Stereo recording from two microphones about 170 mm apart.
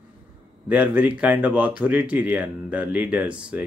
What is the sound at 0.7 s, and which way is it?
Speech, 10° right (ahead or behind).